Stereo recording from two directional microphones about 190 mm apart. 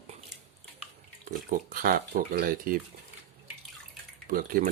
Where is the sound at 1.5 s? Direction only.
50° right (ahead or behind).